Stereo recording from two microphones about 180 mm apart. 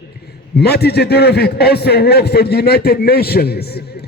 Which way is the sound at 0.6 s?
65° left (ahead or behind).